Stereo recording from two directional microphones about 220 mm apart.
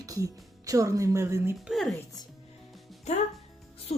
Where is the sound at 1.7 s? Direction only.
Centre (ahead or behind).